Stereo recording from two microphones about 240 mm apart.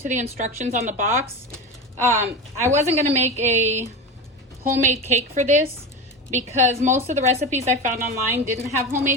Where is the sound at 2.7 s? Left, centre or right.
Right.